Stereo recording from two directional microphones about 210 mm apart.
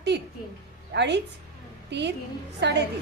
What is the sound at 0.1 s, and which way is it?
A woman's voice, 55° right (ahead or behind).